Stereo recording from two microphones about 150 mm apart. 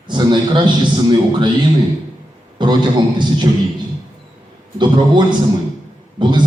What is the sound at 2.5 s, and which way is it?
Speech, 30° right (ahead or behind).